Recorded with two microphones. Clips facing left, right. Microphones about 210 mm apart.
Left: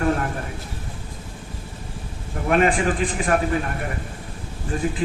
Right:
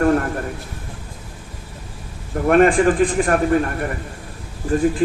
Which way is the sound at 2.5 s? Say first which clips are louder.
Right 6 dB; 50° right (ahead or behind).